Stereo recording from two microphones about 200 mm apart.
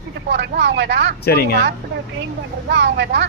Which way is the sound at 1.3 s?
50° left (ahead or behind).